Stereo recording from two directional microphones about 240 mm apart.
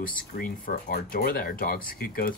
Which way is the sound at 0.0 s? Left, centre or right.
Left.